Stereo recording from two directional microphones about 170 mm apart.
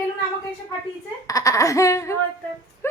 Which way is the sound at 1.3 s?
20° left (ahead or behind).